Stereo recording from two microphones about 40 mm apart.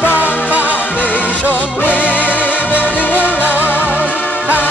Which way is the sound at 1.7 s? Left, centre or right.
Left.